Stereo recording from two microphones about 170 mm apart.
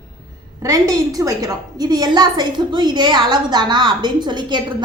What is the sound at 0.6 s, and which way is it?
A woman's voice, 20° right (ahead or behind).